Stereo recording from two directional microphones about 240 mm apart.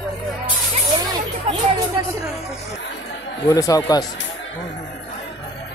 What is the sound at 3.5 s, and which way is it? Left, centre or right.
Speech, centre.